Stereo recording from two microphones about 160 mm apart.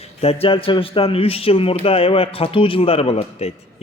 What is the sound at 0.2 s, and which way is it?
Speech, 40° left (ahead or behind).